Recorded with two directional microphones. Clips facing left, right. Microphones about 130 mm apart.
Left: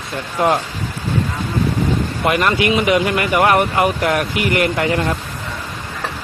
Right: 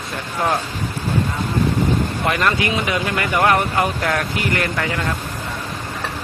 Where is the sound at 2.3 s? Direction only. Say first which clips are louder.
Left 5 dB; 20° left (ahead or behind).